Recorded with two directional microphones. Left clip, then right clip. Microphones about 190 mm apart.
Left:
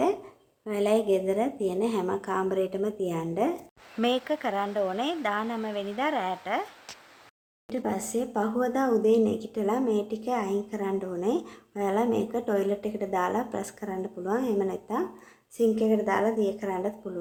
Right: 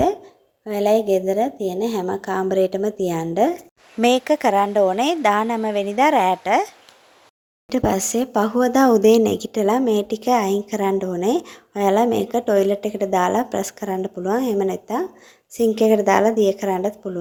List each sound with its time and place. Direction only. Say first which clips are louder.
0.6 s speech: right 7 dB; 25° right (ahead or behind); by 6.7 s 40° right (ahead or behind)
7.7 s speech: right 10 dB; 45° right (ahead or behind)